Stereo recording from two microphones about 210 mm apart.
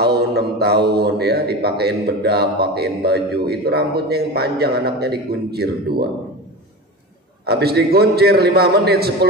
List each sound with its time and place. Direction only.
0.0 s a man's voice: 50° right (ahead or behind)
7.4 s a man's voice: 50° right (ahead or behind)